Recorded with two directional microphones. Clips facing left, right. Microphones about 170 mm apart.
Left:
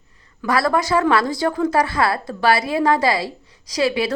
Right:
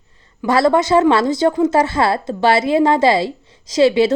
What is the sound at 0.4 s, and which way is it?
A woman's voice, 25° right (ahead or behind).